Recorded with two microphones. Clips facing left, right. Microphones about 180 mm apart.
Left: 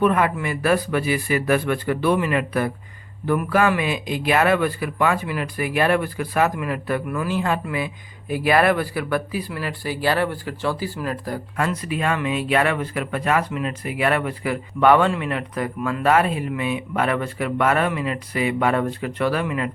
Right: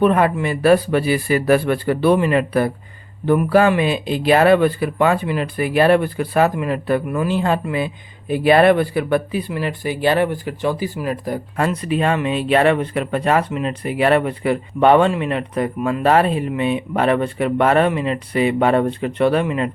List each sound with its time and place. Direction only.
0.0 s speech: 30° right (ahead or behind)
11.5 s speech: 30° right (ahead or behind)